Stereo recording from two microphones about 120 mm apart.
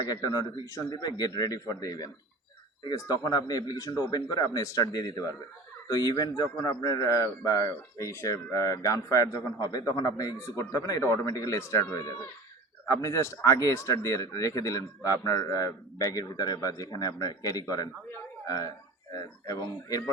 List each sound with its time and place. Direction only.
0.1 s a man's voice: 35° left (ahead or behind)